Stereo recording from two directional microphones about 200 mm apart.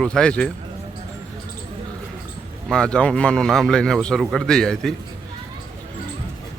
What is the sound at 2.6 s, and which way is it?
A man's voice, 5° left (ahead or behind).